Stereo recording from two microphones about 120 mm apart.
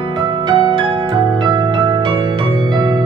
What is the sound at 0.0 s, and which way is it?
Music, 40° right (ahead or behind).